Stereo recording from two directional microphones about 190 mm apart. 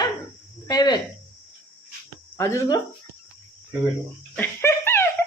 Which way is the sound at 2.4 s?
15° left (ahead or behind).